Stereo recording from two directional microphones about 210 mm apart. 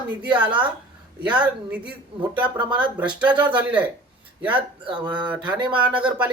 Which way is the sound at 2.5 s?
20° right (ahead or behind).